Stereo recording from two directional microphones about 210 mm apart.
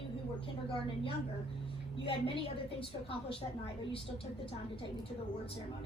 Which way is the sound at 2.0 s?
25° left (ahead or behind).